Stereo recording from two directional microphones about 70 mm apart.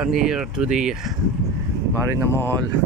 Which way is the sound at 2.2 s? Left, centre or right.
Left.